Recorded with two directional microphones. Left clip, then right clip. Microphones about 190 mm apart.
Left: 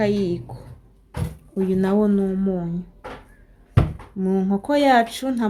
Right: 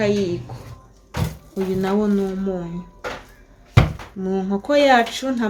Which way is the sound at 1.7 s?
45° left (ahead or behind).